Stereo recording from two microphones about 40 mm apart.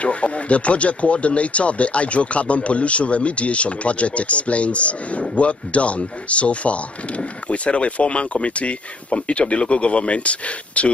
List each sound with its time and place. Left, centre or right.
0.0 s speech: left